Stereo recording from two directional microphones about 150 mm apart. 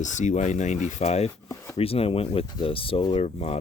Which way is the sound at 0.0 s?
55° left (ahead or behind).